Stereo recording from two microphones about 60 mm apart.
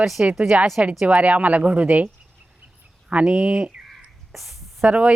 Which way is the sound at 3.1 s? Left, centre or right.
Centre.